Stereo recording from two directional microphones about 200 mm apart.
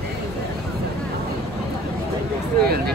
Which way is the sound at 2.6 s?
50° right (ahead or behind).